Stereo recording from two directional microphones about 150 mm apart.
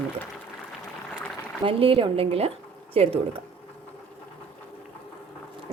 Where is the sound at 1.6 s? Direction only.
35° right (ahead or behind).